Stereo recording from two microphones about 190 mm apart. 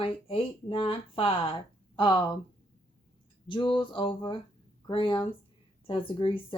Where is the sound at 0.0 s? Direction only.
30° left (ahead or behind).